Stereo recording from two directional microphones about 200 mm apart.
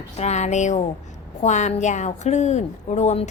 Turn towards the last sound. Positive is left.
turn(degrees=35)  # may be behind; listen again after turning